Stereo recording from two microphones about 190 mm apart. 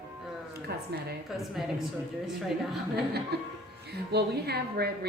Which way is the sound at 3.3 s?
55° right (ahead or behind).